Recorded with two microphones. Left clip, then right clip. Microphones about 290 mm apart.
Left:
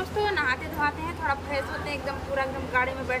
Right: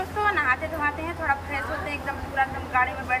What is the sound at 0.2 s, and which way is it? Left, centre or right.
Speech, centre.